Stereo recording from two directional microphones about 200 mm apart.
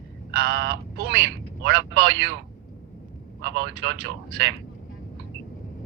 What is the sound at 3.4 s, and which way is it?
A woman's voice, 65° right (ahead or behind).